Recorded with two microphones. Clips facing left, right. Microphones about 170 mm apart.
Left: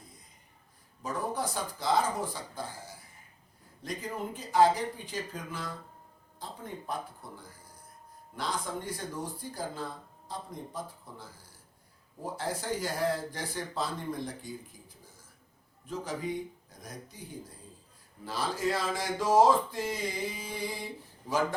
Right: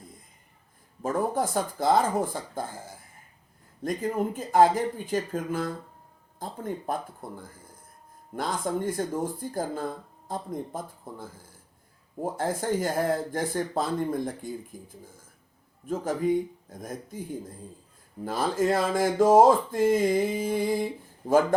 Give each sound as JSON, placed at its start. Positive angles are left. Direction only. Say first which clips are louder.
{"t": 1.0, "sound": "speech", "louder": "right 7 dB", "side_deg": -50}